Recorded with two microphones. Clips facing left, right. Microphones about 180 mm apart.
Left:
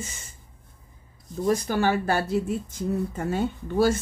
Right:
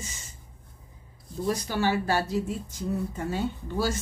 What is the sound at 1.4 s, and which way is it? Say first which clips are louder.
Speech: left 4 dB; 50° left (ahead or behind).